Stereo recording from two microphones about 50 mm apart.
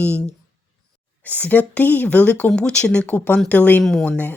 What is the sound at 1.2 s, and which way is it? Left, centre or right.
Speech, left.